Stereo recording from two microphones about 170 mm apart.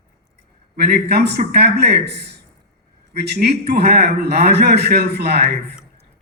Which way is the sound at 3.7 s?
65° right (ahead or behind).